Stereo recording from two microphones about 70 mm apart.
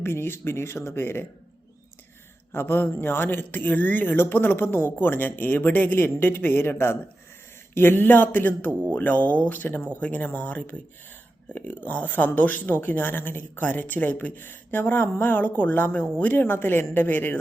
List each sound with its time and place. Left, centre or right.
0.0 s speech: left
2.5 s speech: left